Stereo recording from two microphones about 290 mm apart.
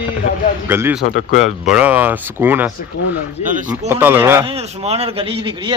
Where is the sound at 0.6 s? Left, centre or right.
Centre.